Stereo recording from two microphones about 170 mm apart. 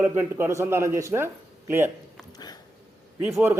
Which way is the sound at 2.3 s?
25° left (ahead or behind).